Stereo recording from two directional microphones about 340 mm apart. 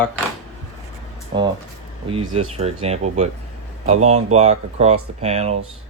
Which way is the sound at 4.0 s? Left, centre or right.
Right.